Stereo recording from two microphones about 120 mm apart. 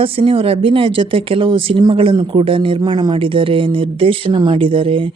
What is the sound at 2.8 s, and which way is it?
Speech, 35° right (ahead or behind).